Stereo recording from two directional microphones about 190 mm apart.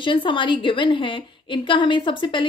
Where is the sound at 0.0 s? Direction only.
25° left (ahead or behind).